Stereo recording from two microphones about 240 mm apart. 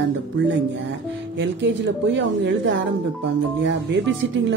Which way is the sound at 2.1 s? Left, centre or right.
Right.